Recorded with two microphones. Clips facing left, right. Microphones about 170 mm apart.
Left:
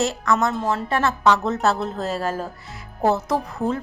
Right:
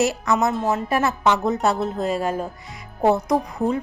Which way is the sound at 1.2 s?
20° right (ahead or behind).